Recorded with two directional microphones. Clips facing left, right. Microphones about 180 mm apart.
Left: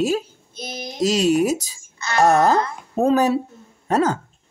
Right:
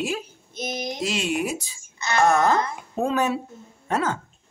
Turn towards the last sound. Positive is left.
turn(degrees=40)  # may be behind; listen again after turning